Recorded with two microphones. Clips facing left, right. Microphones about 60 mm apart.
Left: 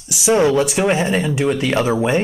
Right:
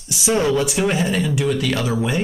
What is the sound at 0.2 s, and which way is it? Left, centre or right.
Speech, left.